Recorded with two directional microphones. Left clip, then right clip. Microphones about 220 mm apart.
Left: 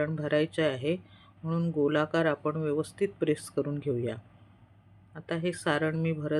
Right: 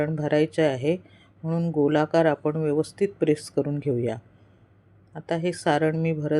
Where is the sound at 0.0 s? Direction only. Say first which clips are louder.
Right 5 dB; 15° right (ahead or behind).